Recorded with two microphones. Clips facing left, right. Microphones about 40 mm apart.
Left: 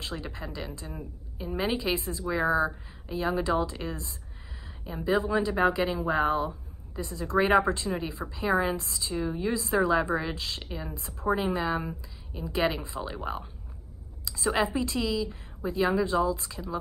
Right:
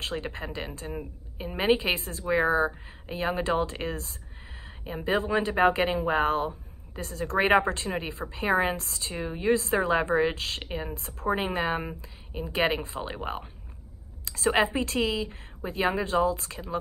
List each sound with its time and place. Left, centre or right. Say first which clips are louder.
0.1 s a woman's voice: right 4 dB; right
2.2 s a woman's voice: right 2 dB; right
5.9 s speech: right 1 dB; right
7.0 s speech: right 1 dB; right
7.3 s a woman's voice: even; right
9.1 s a woman's voice: right 3 dB; right
14.2 s a sound: right 3 dB; right
14.5 s a woman's voice: right 2 dB; right
16.5 s speech: right 2 dB; right